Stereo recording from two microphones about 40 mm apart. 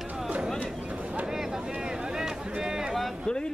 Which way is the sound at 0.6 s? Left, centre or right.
Right.